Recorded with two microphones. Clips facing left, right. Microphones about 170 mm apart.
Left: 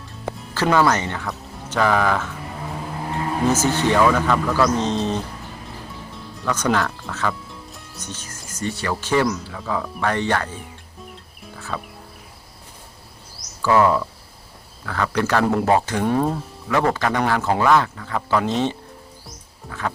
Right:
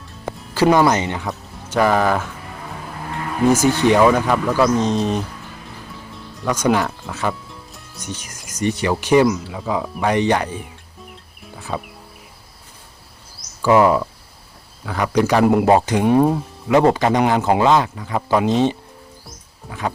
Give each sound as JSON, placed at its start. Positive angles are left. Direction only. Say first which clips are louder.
{"t": 0.5, "sound": "speech", "louder": "right 4 dB", "side_deg": -15}
{"t": 3.1, "sound": "a sound", "louder": "left 2 dB", "side_deg": 25}
{"t": 3.5, "sound": "speech", "louder": "right 5 dB", "side_deg": -15}
{"t": 6.4, "sound": "speech", "louder": "right 3 dB", "side_deg": -10}
{"t": 11.7, "sound": "speech", "louder": "right 4 dB", "side_deg": -15}
{"t": 13.6, "sound": "speech", "louder": "right 3 dB", "side_deg": -15}
{"t": 19.6, "sound": "a sound", "louder": "right 2 dB", "side_deg": 0}